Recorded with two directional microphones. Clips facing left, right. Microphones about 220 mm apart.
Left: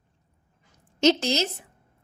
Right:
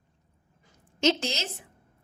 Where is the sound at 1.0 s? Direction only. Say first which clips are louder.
Left 5 dB; 40° left (ahead or behind).